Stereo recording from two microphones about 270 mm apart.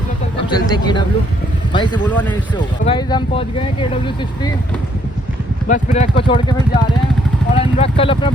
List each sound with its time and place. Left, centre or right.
0.4 s speech: centre
2.0 s speech: centre
2.8 s speech: centre
5.6 s speech: left